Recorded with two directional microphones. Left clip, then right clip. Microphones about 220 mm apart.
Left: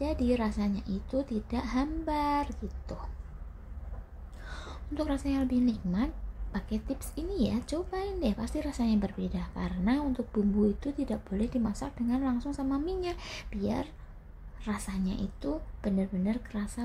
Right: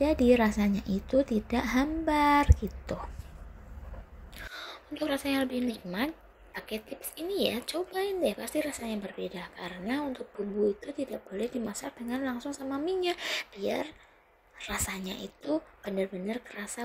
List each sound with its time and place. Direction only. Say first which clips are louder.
0.0 s a woman's voice: right 7 dB; 10° right (ahead or behind)
4.6 s a woman's voice: left 1 dB; 5° right (ahead or behind)
13.1 s a woman's voice: right 7 dB; 20° right (ahead or behind)